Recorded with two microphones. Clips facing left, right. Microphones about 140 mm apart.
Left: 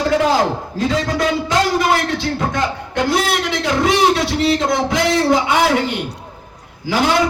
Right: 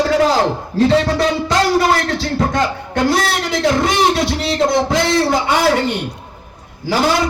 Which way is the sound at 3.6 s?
40° right (ahead or behind).